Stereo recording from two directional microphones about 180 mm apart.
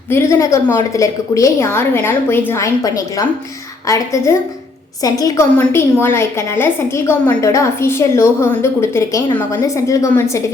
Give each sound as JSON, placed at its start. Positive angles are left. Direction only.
{"t": 0.1, "sound": "a woman's voice", "side_deg": 15}